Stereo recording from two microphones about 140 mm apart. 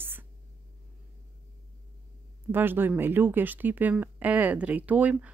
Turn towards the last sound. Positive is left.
turn(degrees=-10)  # may be behind; listen again after turning